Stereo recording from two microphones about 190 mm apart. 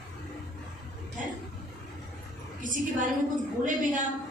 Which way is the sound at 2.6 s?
45° right (ahead or behind).